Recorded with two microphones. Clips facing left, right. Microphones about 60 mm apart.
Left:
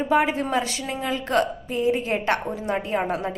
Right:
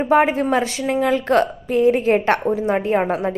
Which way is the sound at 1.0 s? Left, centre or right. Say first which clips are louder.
Right 5 dB; right.